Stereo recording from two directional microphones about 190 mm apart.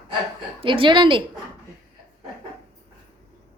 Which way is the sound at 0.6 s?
25° right (ahead or behind).